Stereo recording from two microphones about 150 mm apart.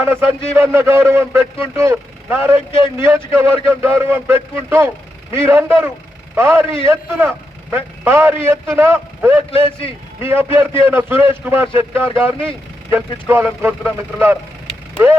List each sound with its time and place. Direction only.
0.0 s a man's voice: 15° right (ahead or behind)